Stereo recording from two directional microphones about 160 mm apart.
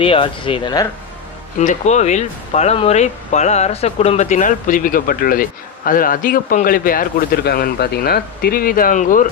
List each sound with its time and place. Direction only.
0.0 s speech: 35° left (ahead or behind)
1.5 s speech: 45° left (ahead or behind)